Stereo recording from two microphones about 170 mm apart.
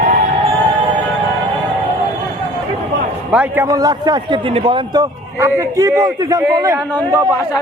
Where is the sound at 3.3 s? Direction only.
10° right (ahead or behind); by 5.0 s 30° right (ahead or behind).